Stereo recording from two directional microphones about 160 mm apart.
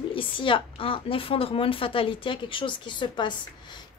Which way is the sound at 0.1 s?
30° left (ahead or behind).